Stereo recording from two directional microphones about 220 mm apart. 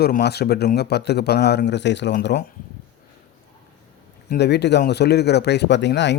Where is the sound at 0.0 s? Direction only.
45° left (ahead or behind).